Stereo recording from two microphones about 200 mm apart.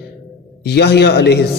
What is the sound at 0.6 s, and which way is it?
Speech, 55° left (ahead or behind).